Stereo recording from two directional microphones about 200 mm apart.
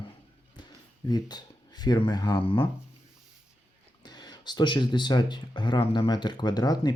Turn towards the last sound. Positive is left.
turn(degrees=20)  # may be behind; listen again after turning